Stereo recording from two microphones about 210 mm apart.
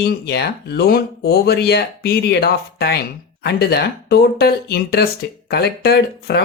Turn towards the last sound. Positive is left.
turn(degrees=50)  # may be behind; listen again after turning